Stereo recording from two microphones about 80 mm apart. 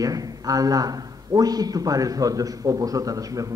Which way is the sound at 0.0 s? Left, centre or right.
Right.